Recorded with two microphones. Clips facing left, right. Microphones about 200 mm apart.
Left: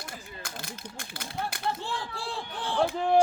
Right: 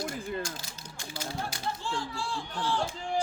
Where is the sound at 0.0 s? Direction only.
50° right (ahead or behind).